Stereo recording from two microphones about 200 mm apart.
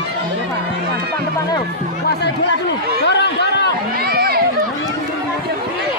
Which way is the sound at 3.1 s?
60° left (ahead or behind).